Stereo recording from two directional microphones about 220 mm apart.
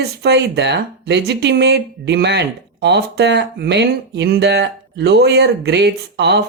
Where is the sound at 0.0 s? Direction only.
50° right (ahead or behind).